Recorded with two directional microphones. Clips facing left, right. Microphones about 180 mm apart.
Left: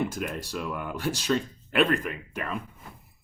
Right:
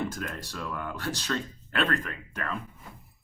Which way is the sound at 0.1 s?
10° left (ahead or behind).